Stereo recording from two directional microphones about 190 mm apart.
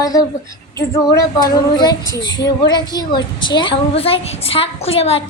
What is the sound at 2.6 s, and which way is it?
A woman's voice, 20° left (ahead or behind).